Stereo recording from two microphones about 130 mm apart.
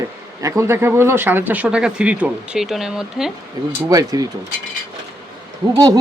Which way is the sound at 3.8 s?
25° right (ahead or behind).